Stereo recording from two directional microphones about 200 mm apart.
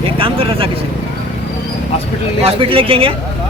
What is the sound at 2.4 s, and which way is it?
Speech, 25° right (ahead or behind).